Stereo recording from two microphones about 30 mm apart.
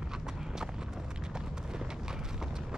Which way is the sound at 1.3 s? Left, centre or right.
Right.